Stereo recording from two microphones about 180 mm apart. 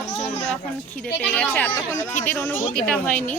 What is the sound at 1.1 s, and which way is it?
Speech, 10° left (ahead or behind).